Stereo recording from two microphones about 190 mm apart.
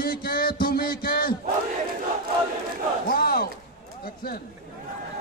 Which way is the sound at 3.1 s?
55° left (ahead or behind).